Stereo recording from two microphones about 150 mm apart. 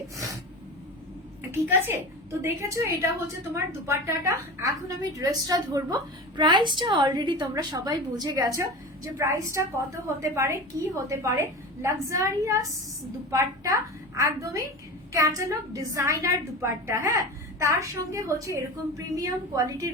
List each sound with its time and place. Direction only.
1.5 s a woman's voice: 15° right (ahead or behind)